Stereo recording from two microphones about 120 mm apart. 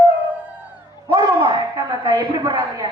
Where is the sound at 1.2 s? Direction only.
40° right (ahead or behind).